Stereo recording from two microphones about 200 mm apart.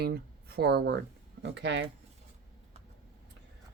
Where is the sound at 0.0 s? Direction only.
55° right (ahead or behind).